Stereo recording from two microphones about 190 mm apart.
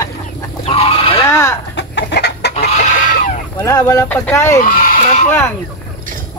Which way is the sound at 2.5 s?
35° left (ahead or behind).